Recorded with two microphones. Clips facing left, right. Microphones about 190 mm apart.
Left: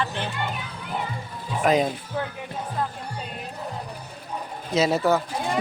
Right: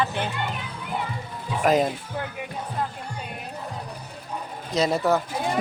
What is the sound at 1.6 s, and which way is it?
Speech, centre (ahead or behind).